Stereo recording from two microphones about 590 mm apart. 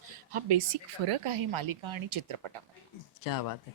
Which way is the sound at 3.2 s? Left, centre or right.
Left.